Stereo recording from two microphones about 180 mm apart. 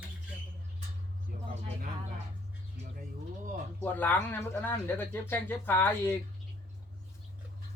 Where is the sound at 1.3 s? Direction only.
50° right (ahead or behind).